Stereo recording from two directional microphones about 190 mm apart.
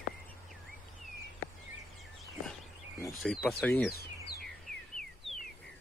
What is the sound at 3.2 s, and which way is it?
Speech, centre (ahead or behind).